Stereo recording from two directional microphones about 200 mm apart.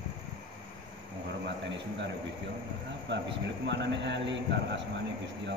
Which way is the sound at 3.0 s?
60° right (ahead or behind).